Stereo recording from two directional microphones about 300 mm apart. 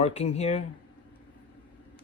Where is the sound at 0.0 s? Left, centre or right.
Left.